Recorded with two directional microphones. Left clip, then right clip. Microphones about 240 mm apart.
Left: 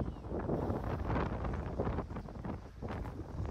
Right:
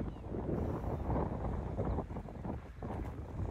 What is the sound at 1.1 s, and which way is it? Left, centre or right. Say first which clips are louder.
Wind noise: left 1 dB; right.